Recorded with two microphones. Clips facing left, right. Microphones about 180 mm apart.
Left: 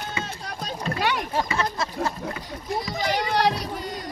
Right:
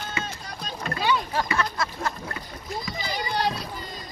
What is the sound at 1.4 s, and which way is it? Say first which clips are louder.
Speech: even; 20° left (ahead or behind).